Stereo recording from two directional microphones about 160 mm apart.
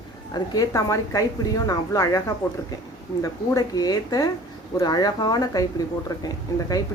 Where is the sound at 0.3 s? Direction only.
20° left (ahead or behind).